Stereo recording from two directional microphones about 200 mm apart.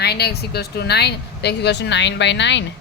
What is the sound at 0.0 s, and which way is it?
Speech, 55° left (ahead or behind).